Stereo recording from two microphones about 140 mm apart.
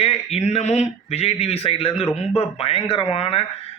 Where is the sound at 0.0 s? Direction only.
45° left (ahead or behind).